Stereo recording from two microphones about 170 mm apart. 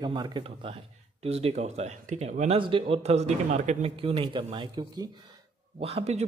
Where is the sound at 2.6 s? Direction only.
30° right (ahead or behind).